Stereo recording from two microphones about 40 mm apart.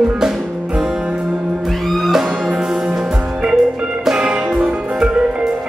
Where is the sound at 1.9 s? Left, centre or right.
Centre.